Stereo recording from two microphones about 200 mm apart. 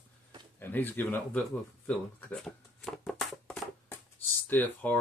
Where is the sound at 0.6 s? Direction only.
10° left (ahead or behind).